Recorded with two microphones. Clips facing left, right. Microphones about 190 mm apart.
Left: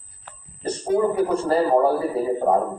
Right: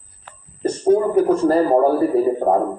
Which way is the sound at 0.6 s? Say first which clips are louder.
Right 5 dB; 50° right (ahead or behind).